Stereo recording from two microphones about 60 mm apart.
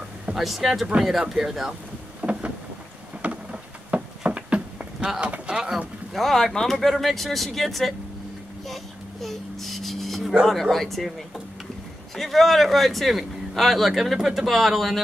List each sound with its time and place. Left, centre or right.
0.3 s speech: centre
2.2 s boat: right
3.2 s a sound: centre
6.1 s a man's voice: centre
9.2 s a sound: centre
10.4 s a man's voice: centre